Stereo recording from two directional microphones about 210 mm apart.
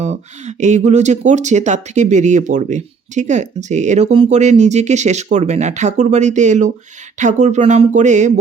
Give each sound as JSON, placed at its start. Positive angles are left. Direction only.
{"t": 0.0, "sound": "speech", "side_deg": -35}